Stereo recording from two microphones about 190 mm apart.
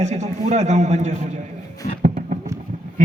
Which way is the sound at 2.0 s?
40° right (ahead or behind).